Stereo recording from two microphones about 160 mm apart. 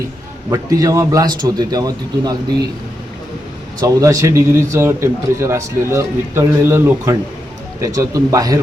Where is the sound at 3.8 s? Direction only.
20° right (ahead or behind).